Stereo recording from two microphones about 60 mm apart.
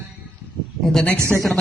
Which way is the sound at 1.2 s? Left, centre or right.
Right.